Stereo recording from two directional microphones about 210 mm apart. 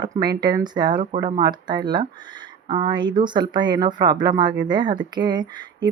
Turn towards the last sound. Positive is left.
turn(degrees=-20)  # may be behind; listen again after turning